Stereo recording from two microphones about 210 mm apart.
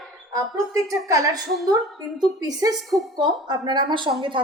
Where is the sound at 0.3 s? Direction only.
15° right (ahead or behind).